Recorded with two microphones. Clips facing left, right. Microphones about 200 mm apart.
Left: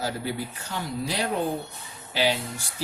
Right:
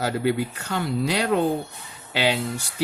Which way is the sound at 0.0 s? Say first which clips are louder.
Right 7 dB; 65° right (ahead or behind).